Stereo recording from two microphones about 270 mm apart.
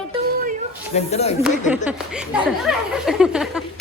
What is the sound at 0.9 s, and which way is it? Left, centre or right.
Speech, left.